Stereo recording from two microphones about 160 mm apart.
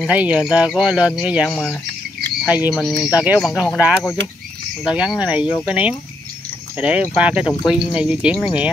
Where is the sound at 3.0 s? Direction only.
25° left (ahead or behind).